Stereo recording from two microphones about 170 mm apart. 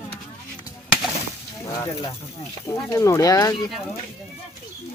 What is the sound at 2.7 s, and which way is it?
Speech, 15° left (ahead or behind).